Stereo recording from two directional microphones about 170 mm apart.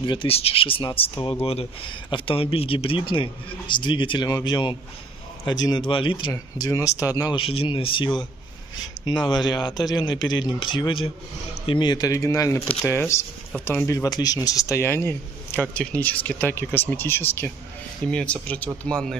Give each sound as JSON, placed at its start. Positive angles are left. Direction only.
{"t": 0.0, "sound": "speech", "side_deg": 30}